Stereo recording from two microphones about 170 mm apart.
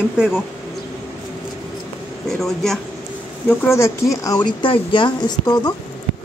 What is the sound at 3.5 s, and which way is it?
Speech, 15° left (ahead or behind).